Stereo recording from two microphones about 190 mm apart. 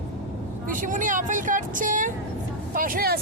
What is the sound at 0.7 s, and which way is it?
Speech, 45° right (ahead or behind).